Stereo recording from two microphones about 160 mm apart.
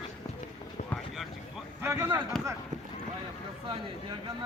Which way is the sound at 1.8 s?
15° right (ahead or behind).